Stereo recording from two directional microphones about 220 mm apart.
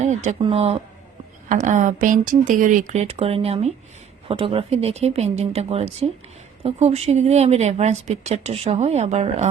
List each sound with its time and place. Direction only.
0.0 s speech: 35° right (ahead or behind)